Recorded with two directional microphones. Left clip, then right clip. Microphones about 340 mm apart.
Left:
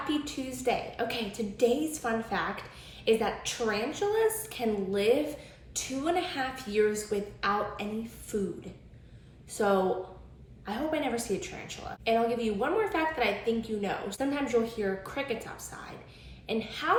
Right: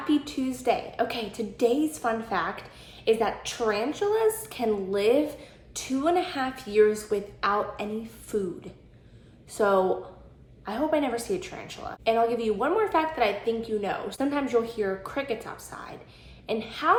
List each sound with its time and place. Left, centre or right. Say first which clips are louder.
0.1 s a woman's voice: right 6 dB; centre
9.5 s a woman's voice: right 4 dB; centre